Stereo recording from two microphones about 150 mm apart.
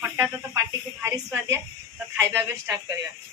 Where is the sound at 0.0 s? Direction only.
15° right (ahead or behind).